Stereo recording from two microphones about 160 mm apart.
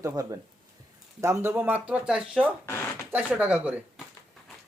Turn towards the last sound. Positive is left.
turn(degrees=-10)  # may be behind; listen again after turning